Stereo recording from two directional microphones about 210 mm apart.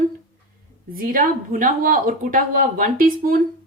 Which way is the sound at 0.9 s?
45° right (ahead or behind).